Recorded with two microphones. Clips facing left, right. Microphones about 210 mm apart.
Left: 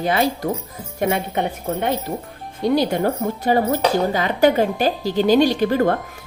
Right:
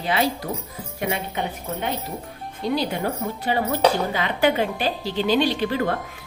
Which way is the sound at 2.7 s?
45° left (ahead or behind).